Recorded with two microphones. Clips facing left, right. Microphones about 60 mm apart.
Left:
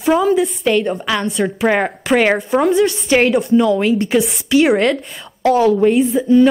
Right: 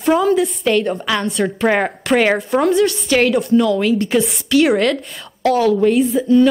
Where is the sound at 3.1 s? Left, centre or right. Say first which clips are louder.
Left 2 dB; centre.